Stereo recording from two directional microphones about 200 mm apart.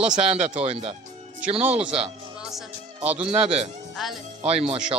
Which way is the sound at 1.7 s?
5° right (ahead or behind).